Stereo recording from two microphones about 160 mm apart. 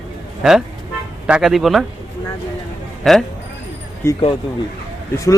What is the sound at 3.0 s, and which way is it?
Speech, centre (ahead or behind).